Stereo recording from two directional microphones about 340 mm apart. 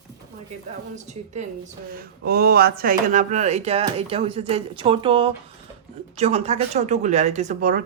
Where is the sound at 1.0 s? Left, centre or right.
Centre.